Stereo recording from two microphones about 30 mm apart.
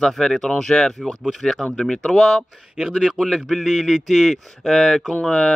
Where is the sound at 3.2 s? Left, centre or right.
Left.